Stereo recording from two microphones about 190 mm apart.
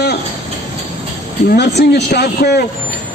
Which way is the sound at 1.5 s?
60° left (ahead or behind).